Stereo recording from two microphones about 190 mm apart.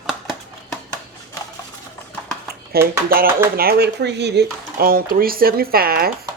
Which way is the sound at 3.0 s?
50° right (ahead or behind).